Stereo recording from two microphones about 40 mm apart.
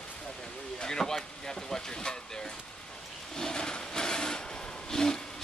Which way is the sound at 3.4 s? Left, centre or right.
Centre.